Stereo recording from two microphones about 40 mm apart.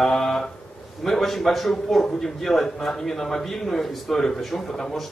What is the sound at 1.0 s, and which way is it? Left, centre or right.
A man's voice, centre.